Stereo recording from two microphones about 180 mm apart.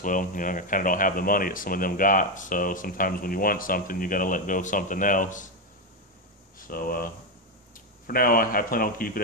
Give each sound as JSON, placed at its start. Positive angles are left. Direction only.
{"t": 0.0, "sound": "speech", "side_deg": 45}
{"t": 6.7, "sound": "speech", "side_deg": 55}